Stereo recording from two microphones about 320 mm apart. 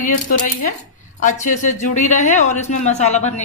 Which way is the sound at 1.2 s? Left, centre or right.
Left.